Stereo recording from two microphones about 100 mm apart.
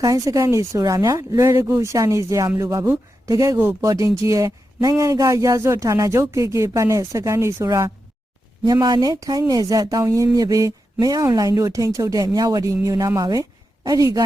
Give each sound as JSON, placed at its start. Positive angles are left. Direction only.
{"t": 0.0, "sound": "speech", "side_deg": -35}